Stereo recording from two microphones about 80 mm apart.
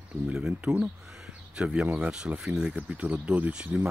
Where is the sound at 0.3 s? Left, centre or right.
Centre.